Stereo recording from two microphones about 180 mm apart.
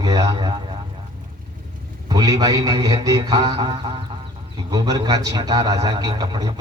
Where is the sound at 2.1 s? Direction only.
20° right (ahead or behind).